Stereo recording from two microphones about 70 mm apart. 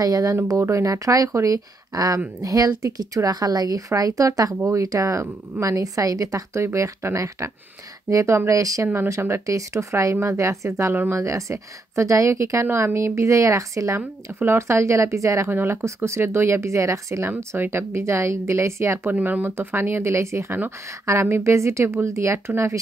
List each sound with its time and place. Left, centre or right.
0.0 s speech: right
0.6 s a woman's voice: right
8.8 s speech: right
9.2 s a woman's voice: right
13.9 s speech: right
19.2 s a woman's voice: right